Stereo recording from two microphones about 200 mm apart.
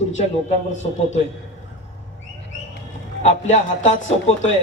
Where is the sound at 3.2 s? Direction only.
35° left (ahead or behind).